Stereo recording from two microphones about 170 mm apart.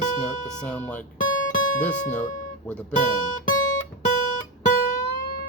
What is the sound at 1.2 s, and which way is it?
Guitar, 50° left (ahead or behind).